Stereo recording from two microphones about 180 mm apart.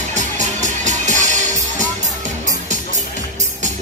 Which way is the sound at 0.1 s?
40° right (ahead or behind).